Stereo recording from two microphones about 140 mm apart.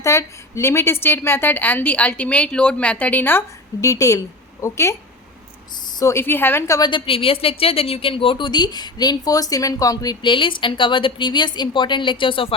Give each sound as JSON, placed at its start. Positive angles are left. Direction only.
{"t": 0.0, "sound": "a woman's voice", "side_deg": 20}